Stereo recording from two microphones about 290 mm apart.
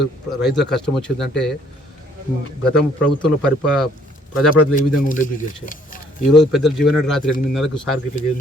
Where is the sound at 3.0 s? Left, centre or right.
Centre.